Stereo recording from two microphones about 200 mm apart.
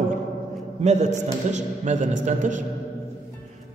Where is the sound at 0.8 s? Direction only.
35° right (ahead or behind).